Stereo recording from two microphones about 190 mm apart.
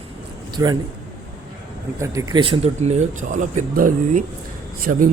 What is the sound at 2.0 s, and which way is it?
Speech, 15° right (ahead or behind).